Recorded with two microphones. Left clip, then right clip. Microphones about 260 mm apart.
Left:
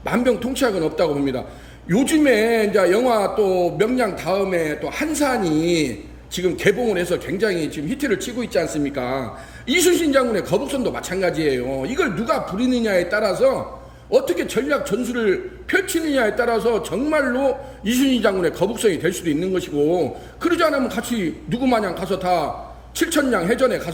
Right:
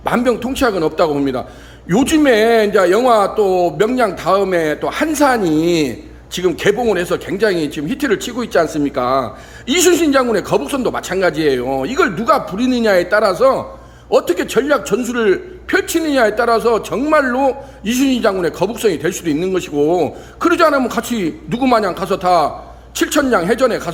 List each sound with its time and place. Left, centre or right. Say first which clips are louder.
0.0 s a man's voice: right 4 dB; centre